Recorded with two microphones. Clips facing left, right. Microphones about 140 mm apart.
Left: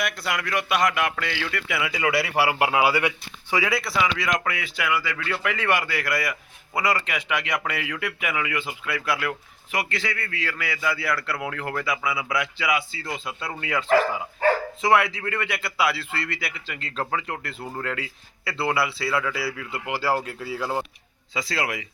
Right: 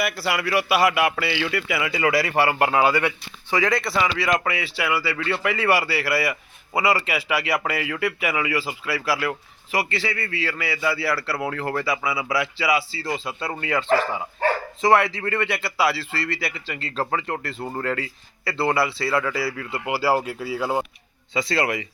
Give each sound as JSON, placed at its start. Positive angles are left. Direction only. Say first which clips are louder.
{"t": 0.0, "sound": "a man's voice", "louder": "right 3 dB", "side_deg": -5}
{"t": 21.3, "sound": "a man's voice", "louder": "right 5 dB", "side_deg": 0}